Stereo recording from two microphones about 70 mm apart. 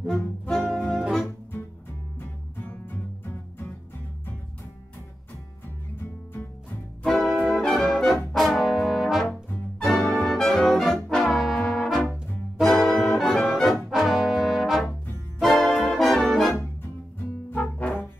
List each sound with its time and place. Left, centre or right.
0.5 s saxophone: centre
0.9 s music: centre
2.1 s music: left
7.1 s brass instrument: centre
9.8 s music: centre
11.1 s brass instrument: centre
11.3 s trombone: centre
11.6 s brass instrument: centre
14.9 s music: left
15.4 s brass instrument: centre